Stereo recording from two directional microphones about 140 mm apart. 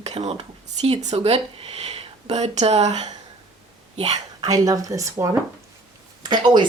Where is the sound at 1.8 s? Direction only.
50° right (ahead or behind).